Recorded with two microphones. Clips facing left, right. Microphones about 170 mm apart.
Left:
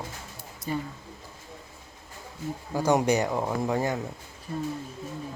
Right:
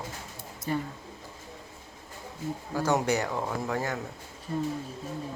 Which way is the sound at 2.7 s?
15° left (ahead or behind).